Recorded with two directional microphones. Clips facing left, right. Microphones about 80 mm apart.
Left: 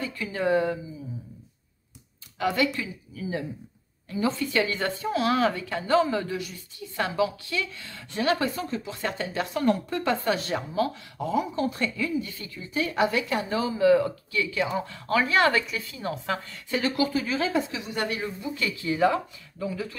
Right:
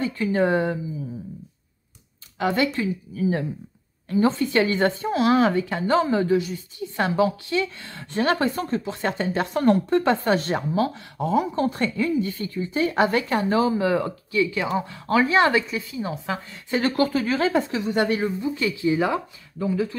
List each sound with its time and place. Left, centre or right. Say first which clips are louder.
0.0 s speech: right 6 dB; right
2.3 s speech: right 3 dB; right
2.8 s speech: right 9 dB; right
7.1 s speech: right 5 dB; right
7.4 s a woman's voice: right 6 dB; right; by 16.5 s centre
16.7 s speech: right 4 dB; right